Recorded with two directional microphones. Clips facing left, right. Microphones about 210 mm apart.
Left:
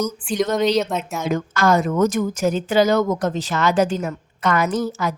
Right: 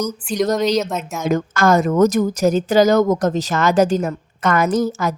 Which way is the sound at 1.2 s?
45° right (ahead or behind).